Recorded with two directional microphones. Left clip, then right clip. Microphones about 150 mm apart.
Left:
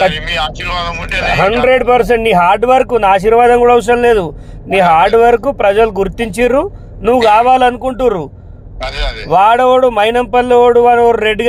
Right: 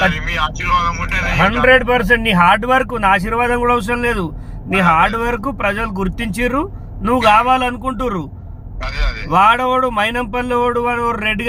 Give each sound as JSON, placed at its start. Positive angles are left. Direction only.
{"t": 0.1, "sound": "speech", "side_deg": 15}
{"t": 1.6, "sound": "speech", "side_deg": 45}
{"t": 8.8, "sound": "speech", "side_deg": 10}
{"t": 9.3, "sound": "speech", "side_deg": 40}